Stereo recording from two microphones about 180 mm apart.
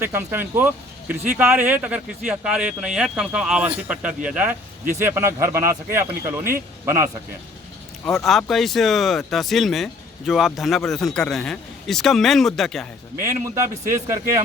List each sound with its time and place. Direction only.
0.0 s speech: 10° right (ahead or behind)
8.0 s speech: centre (ahead or behind)
13.8 s speech: 15° right (ahead or behind)